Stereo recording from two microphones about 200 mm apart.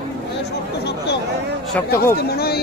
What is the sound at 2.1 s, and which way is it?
Speech, 50° left (ahead or behind).